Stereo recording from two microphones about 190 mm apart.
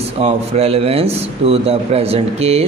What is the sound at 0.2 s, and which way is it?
Speech, 35° right (ahead or behind).